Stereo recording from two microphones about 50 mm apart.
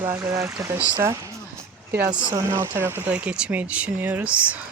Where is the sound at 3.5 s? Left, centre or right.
Right.